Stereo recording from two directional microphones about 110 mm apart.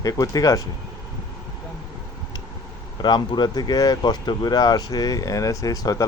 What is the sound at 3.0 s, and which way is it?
Speech, 40° left (ahead or behind).